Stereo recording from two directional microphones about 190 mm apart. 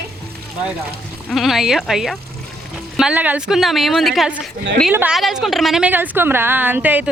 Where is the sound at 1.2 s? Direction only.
Centre (ahead or behind).